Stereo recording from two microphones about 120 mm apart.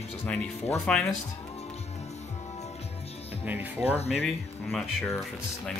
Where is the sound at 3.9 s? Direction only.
60° left (ahead or behind).